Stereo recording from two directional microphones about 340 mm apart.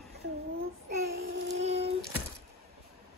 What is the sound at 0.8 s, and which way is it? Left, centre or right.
Child singing, right.